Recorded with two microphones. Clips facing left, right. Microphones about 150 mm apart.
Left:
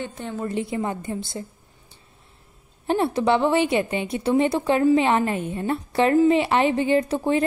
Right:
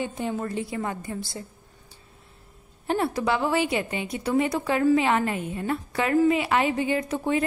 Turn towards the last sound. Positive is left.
turn(degrees=30)  # may be behind; listen again after turning